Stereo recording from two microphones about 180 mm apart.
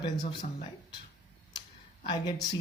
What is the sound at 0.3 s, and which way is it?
Speech, 25° left (ahead or behind).